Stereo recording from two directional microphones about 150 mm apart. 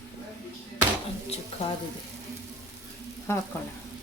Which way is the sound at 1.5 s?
40° left (ahead or behind).